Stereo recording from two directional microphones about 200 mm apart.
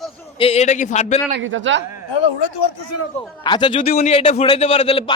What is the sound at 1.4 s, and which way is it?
Speech, 75° right (ahead or behind).